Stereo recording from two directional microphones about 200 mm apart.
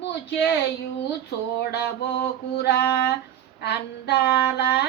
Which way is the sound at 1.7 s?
55° left (ahead or behind).